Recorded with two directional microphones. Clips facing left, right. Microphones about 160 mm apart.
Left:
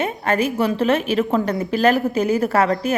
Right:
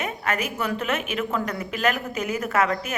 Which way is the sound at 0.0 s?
30° left (ahead or behind).